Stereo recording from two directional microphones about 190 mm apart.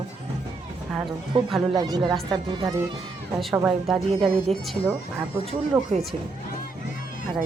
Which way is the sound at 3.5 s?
5° right (ahead or behind).